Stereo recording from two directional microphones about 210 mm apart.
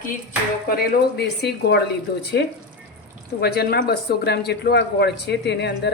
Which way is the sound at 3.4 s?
50° left (ahead or behind).